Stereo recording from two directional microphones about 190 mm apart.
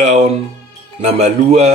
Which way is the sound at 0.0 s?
35° right (ahead or behind).